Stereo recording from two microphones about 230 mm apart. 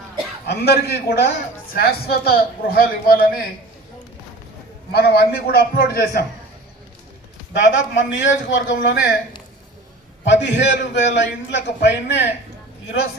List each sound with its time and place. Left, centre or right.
0.4 s a man's voice: left
4.9 s a man's voice: left
7.6 s a man's voice: left
10.2 s a man's voice: left